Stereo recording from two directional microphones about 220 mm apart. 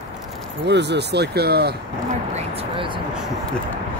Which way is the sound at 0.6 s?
50° right (ahead or behind).